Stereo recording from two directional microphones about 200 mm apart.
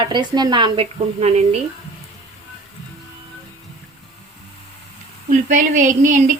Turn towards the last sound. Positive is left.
turn(degrees=-40)  # may be behind; listen again after turning